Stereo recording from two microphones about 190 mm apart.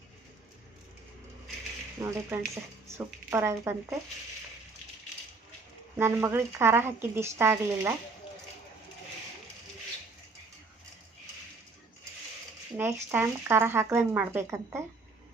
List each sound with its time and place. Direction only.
2.0 s speech: 15° right (ahead or behind)
6.0 s speech: 15° right (ahead or behind)
12.7 s speech: 15° right (ahead or behind)